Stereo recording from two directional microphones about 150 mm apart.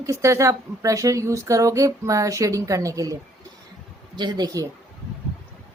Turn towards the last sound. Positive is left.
turn(degrees=-25)  # may be behind; listen again after turning